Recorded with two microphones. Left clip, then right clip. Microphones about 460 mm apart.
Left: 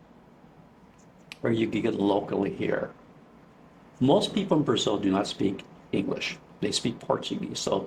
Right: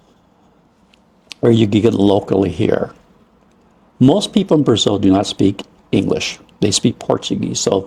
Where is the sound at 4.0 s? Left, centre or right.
Right.